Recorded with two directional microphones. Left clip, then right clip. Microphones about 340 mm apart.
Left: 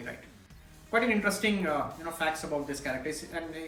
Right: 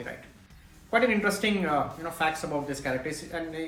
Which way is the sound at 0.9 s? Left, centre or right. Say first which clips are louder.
Right 3 dB; centre.